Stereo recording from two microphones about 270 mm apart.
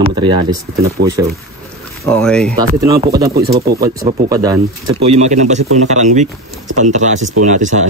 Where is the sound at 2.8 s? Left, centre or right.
Centre.